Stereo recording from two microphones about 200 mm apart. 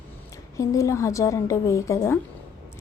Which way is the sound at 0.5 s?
15° left (ahead or behind).